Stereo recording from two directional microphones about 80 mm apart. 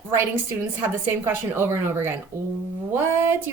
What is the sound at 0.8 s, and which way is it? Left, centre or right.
A woman's voice, right.